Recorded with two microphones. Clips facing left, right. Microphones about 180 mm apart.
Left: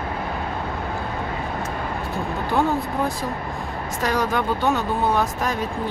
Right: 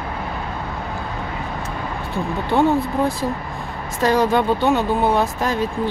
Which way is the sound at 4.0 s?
30° right (ahead or behind).